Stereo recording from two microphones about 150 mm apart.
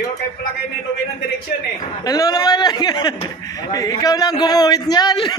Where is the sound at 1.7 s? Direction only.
25° left (ahead or behind).